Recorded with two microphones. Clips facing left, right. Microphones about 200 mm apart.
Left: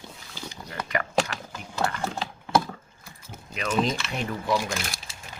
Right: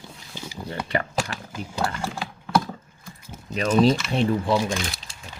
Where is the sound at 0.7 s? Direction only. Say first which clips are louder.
Right 3 dB; 30° right (ahead or behind).